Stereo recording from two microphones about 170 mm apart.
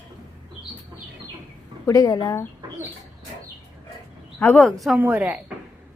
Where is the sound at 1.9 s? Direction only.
20° left (ahead or behind).